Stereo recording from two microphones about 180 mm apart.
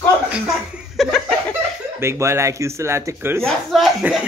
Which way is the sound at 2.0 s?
15° right (ahead or behind).